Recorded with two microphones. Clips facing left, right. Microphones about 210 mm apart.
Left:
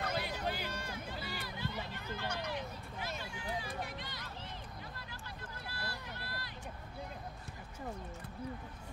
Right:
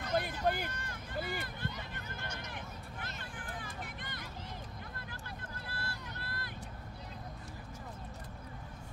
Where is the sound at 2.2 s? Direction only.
60° left (ahead or behind).